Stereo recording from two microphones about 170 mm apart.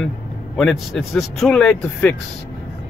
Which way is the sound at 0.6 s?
Centre (ahead or behind).